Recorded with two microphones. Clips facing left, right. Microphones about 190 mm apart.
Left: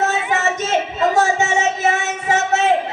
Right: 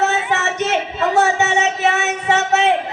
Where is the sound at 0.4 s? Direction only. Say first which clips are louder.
Even; 65° right (ahead or behind).